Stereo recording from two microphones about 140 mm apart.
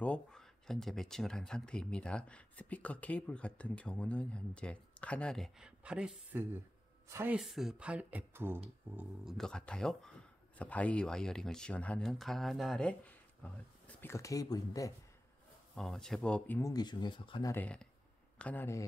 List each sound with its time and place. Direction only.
0.0 s speech: 5° left (ahead or behind); by 7.3 s 15° right (ahead or behind)
7.3 s speech: centre (ahead or behind)
9.2 s speech: centre (ahead or behind)
14.1 s speech: 25° left (ahead or behind)
15.7 s speech: 5° left (ahead or behind)
16.7 s speech: 30° left (ahead or behind)
17.5 s speech: 10° left (ahead or behind)